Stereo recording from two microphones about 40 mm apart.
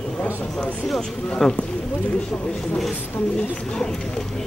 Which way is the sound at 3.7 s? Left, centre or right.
Centre.